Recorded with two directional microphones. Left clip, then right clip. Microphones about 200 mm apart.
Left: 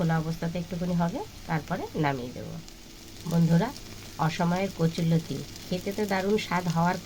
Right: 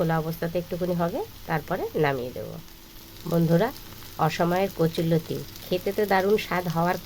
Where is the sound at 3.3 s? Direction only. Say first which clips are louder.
Right 6 dB; 30° right (ahead or behind).